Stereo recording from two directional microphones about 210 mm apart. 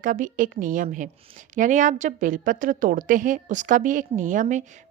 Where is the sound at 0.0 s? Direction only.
40° right (ahead or behind).